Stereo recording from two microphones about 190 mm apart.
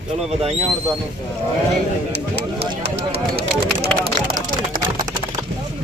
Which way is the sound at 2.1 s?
60° right (ahead or behind).